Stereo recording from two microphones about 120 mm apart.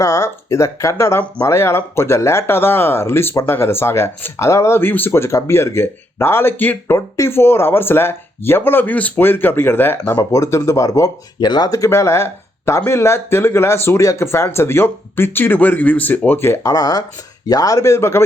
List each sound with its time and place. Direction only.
0.0 s speech: 25° left (ahead or behind)